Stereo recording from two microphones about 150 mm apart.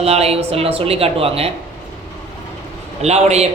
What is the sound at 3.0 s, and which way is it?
Speech, 45° right (ahead or behind).